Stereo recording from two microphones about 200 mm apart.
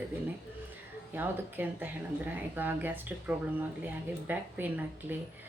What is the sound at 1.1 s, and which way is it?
Speech, 10° right (ahead or behind).